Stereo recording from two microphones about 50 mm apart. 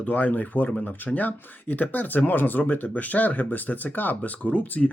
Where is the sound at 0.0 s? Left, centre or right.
Left.